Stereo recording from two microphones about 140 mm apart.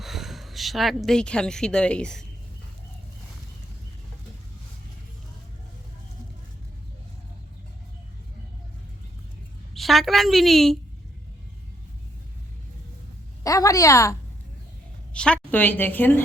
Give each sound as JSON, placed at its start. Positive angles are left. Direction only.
{"t": 0.0, "sound": "speech", "side_deg": 0}
{"t": 9.7, "sound": "a woman's voice", "side_deg": 0}
{"t": 13.4, "sound": "a woman's voice", "side_deg": 25}
{"t": 15.1, "sound": "a woman's voice", "side_deg": 5}